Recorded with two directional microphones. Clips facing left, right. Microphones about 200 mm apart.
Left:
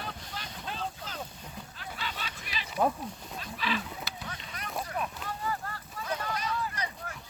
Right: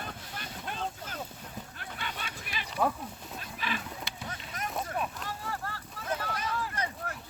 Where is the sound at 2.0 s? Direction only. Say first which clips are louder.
Even; 50° right (ahead or behind).